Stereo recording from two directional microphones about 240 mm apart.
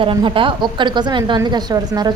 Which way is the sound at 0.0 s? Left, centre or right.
Right.